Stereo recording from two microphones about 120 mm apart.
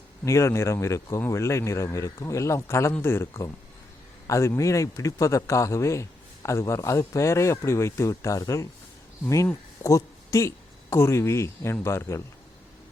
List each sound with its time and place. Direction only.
0.3 s speech: 25° left (ahead or behind)
9.8 s speech: 25° left (ahead or behind)